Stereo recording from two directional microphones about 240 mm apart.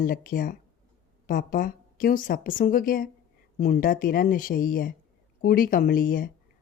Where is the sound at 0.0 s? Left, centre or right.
Left.